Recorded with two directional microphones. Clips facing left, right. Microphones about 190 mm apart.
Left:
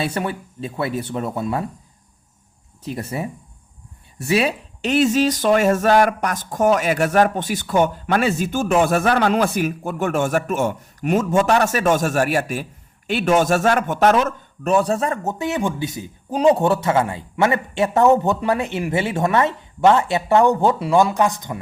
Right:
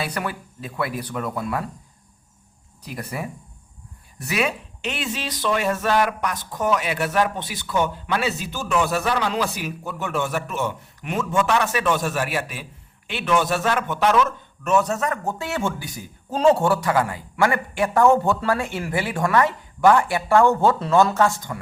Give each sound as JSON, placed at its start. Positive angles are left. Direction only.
{"t": 0.0, "sound": "a man's voice", "side_deg": 25}
{"t": 2.8, "sound": "a man's voice", "side_deg": 25}